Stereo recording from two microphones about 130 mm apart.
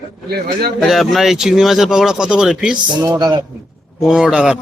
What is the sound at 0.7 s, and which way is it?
Speech, centre (ahead or behind).